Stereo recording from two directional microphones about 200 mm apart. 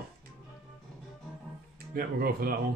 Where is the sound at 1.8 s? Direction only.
50° right (ahead or behind).